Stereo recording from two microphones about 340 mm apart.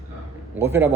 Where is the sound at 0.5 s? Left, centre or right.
Centre.